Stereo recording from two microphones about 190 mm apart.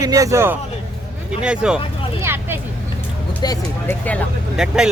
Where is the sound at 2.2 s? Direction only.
10° right (ahead or behind).